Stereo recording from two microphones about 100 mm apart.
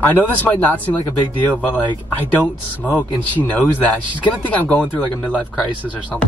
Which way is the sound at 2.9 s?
15° left (ahead or behind).